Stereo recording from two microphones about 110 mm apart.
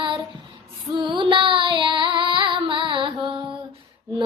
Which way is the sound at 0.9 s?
45° right (ahead or behind).